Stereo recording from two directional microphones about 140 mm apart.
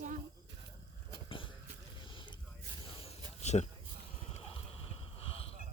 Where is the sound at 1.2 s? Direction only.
40° left (ahead or behind).